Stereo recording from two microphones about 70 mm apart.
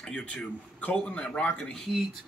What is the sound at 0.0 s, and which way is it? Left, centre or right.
Speech, centre.